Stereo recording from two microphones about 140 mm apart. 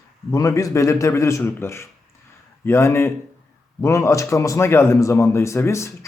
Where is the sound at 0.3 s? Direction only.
25° left (ahead or behind).